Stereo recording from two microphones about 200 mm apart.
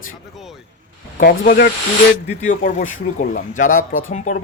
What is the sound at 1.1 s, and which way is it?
Speech, 45° left (ahead or behind).